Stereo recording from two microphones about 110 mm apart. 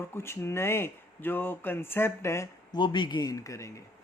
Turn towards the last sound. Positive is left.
turn(degrees=30)  # may be behind; listen again after turning